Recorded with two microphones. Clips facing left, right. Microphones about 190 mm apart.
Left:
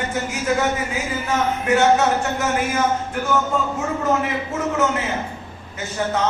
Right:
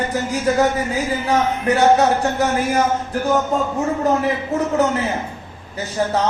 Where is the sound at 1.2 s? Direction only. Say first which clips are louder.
Right 2 dB; 35° right (ahead or behind).